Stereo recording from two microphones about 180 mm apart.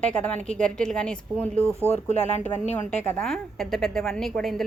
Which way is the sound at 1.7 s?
15° right (ahead or behind).